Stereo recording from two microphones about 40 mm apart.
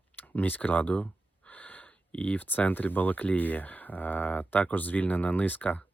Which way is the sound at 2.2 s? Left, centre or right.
Left.